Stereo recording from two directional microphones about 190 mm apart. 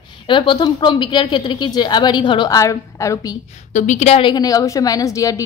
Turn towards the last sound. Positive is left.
turn(degrees=15)  # may be behind; listen again after turning